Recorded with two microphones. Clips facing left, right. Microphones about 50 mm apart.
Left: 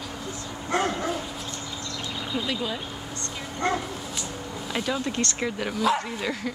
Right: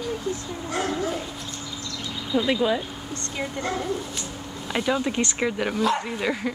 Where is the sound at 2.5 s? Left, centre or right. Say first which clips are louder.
Right 10 dB; right.